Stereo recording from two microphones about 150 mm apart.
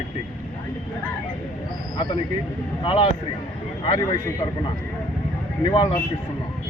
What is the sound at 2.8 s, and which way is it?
Speech, 35° left (ahead or behind).